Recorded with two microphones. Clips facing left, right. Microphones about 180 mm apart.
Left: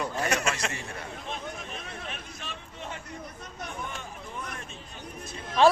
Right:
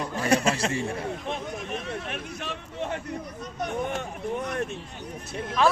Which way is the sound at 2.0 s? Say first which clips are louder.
Right 6 dB; 60° right (ahead or behind).